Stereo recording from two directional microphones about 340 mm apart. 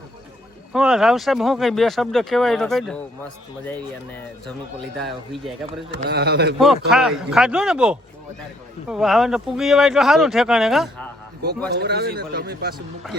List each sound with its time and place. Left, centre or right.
0.7 s speech: centre
6.0 s speech: right
6.6 s speech: centre
11.8 s speech: right